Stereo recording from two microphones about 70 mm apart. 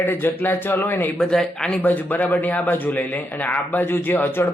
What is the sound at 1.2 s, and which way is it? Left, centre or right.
Speech, centre.